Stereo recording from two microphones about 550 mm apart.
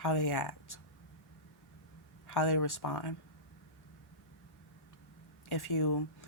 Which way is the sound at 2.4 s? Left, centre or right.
Left.